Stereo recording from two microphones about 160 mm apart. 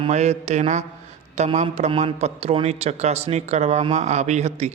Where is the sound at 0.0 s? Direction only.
45° right (ahead or behind).